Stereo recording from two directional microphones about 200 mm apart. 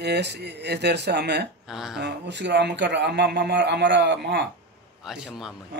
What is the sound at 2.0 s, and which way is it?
Speech, 60° right (ahead or behind).